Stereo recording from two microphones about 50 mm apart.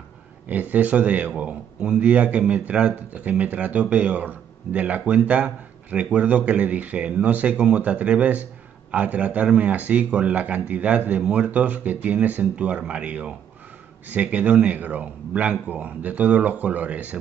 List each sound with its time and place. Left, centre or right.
0.5 s speech: right